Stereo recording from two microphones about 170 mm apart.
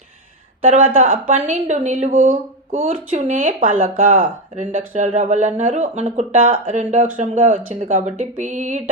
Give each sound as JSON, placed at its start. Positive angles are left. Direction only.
{"t": 0.7, "sound": "a woman's voice", "side_deg": -50}